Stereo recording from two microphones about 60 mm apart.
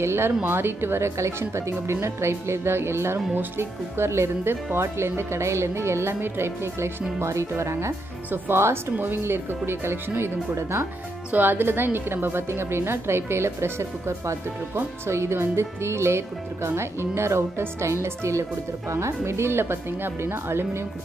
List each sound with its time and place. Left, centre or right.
0.0 s speech: right
8.9 s speech: right
11.3 s speech: right